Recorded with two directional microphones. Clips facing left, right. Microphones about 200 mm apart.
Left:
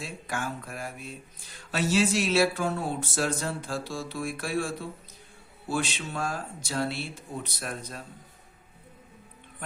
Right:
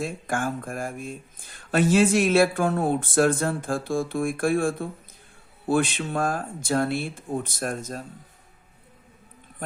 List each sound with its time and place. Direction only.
0.0 s speech: 50° right (ahead or behind)